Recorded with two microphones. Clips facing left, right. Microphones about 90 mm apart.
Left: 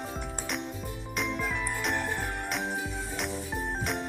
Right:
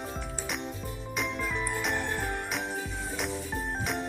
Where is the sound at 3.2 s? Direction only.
Centre (ahead or behind).